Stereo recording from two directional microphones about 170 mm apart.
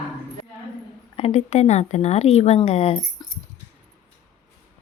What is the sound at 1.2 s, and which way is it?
Speech, 40° left (ahead or behind).